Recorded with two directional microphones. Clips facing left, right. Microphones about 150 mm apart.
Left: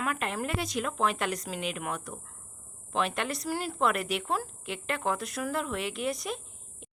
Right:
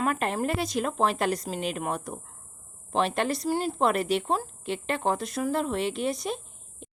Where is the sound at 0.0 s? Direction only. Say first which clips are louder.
Right 5 dB; 35° right (ahead or behind).